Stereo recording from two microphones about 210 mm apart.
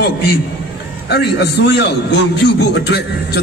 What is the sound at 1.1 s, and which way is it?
A man's voice, 55° left (ahead or behind).